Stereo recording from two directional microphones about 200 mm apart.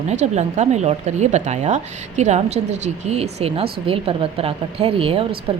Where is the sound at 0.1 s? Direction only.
35° right (ahead or behind).